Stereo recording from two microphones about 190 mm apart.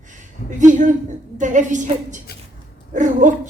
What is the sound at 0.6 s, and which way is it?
A woman's voice, 40° right (ahead or behind).